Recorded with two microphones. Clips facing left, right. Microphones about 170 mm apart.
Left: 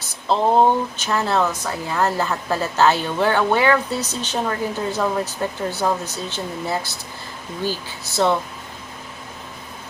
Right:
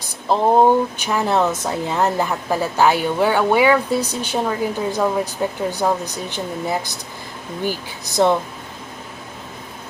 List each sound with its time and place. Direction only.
0.0 s speech: 10° right (ahead or behind)